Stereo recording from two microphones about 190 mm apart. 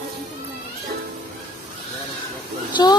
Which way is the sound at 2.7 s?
20° left (ahead or behind).